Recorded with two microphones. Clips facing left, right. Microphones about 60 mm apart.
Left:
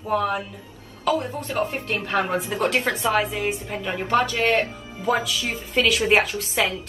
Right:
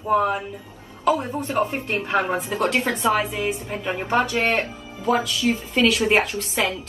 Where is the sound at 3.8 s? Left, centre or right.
Centre.